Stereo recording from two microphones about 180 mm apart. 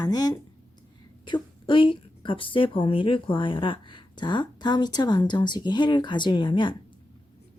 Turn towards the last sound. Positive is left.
turn(degrees=25)  # may be behind; listen again after turning